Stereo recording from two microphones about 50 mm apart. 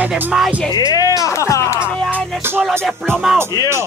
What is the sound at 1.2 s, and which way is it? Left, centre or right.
Speech, left.